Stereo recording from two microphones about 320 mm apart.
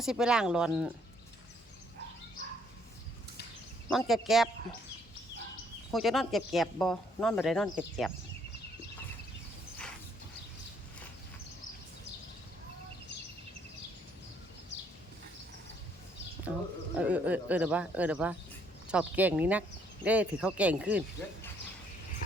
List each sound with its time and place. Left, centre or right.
0.0 s speech: centre
3.8 s speech: centre
5.9 s speech: centre
16.9 s speech: centre